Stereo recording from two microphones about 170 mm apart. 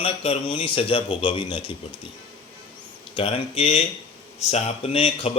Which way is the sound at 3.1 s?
30° left (ahead or behind).